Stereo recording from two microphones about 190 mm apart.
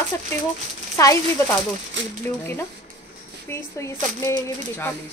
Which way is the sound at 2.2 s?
10° left (ahead or behind).